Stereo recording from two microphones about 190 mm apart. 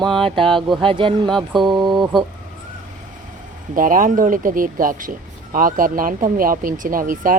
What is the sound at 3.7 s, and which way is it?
Speech, 45° right (ahead or behind).